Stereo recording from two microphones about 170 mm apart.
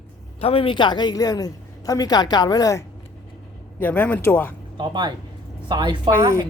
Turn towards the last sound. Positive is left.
turn(degrees=-15)  # may be behind; listen again after turning